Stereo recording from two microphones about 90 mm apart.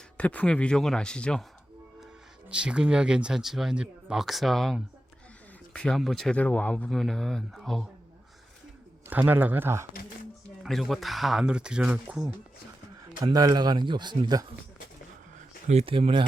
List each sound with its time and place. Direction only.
0.2 s speech: 15° left (ahead or behind)
2.5 s speech: 10° right (ahead or behind)
6.3 s speech: 15° left (ahead or behind)
6.9 s speech: 5° left (ahead or behind)
9.0 s speech: 20° right (ahead or behind)
10.7 s speech: centre (ahead or behind)
13.2 s speech: 45° right (ahead or behind)
15.8 s speech: 90° right